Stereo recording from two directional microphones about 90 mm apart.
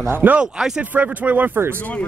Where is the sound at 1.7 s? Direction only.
20° left (ahead or behind).